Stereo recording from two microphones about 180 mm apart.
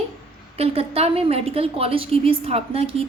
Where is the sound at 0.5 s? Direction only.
35° right (ahead or behind).